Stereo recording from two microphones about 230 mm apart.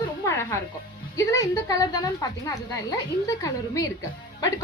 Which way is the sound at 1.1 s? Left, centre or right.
Centre.